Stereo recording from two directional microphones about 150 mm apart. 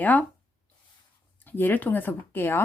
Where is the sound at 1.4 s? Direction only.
15° left (ahead or behind).